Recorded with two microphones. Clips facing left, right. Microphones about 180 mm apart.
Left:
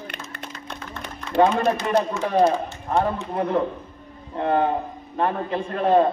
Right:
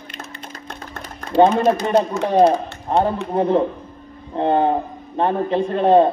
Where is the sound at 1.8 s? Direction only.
35° right (ahead or behind).